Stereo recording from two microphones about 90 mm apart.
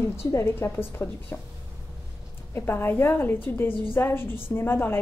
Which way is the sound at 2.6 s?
25° left (ahead or behind).